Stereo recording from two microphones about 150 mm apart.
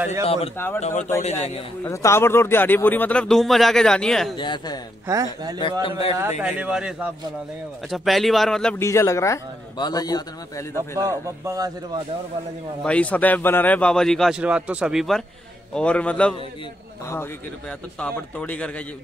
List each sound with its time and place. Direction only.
0.2 s a man's voice: 40° left (ahead or behind)
1.9 s speech: 20° left (ahead or behind); by 4.4 s 5° left (ahead or behind)
4.4 s a man's voice: 30° left (ahead or behind)
5.0 s a man's voice: 20° right (ahead or behind)
5.6 s a man's voice: 35° left (ahead or behind)
6.4 s a man's voice: 10° right (ahead or behind)
8.7 s a man's voice: 20° left (ahead or behind)
11.0 s a man's voice: 20° right (ahead or behind)
12.8 s a man's voice: 10° left (ahead or behind)